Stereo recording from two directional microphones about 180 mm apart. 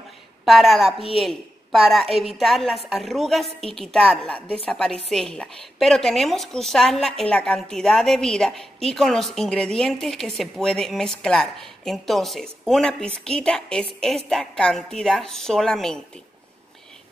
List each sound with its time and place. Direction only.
0.5 s a woman's voice: centre (ahead or behind)